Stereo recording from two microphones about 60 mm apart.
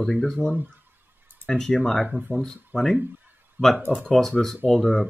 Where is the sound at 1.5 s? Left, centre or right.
Centre.